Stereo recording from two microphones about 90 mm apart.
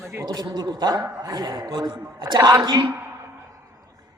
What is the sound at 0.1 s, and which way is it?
Speech, 35° right (ahead or behind).